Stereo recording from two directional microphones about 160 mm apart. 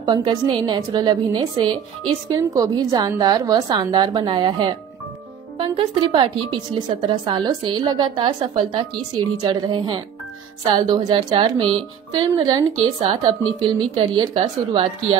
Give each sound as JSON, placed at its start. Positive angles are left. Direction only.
{"t": 0.0, "sound": "speech", "side_deg": -30}